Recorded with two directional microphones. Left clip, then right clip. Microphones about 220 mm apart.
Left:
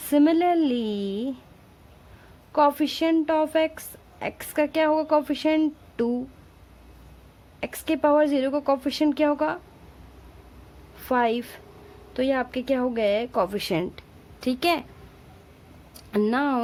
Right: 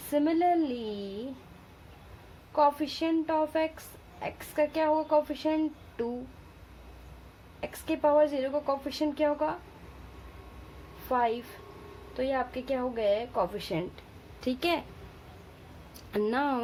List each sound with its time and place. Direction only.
0.1 s speech: 40° left (ahead or behind)
2.5 s speech: 40° left (ahead or behind)
7.6 s speech: 40° left (ahead or behind)
11.1 s speech: 40° left (ahead or behind)
16.1 s speech: 30° left (ahead or behind)